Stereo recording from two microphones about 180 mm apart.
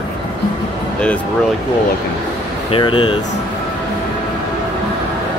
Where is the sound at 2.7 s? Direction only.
25° left (ahead or behind).